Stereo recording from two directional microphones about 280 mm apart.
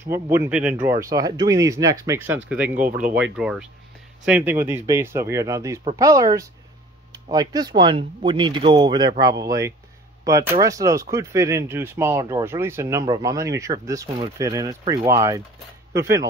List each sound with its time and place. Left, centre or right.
0.0 s speech: centre